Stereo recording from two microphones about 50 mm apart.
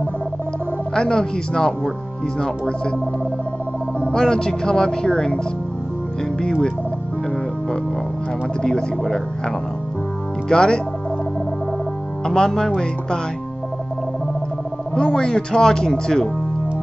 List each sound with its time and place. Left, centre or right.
0.9 s speech: centre
4.1 s speech: centre
8.6 s speech: centre
10.5 s speech: centre
12.3 s speech: centre
15.0 s speech: centre